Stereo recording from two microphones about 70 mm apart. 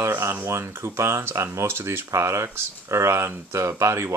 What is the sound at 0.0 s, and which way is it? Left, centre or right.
Speech, right.